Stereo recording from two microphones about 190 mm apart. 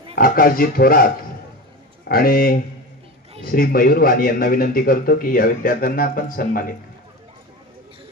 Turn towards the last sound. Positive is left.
turn(degrees=50)  # may be behind; listen again after turning